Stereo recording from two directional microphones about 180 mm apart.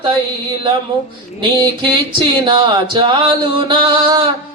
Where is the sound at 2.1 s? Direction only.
30° right (ahead or behind).